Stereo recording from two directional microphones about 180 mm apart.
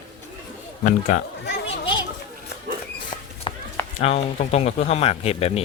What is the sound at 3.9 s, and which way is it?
Speech, 35° left (ahead or behind).